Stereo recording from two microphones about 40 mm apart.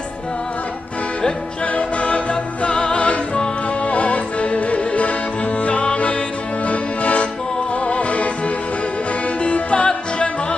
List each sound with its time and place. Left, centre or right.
1.7 s music: left
9.4 s music: left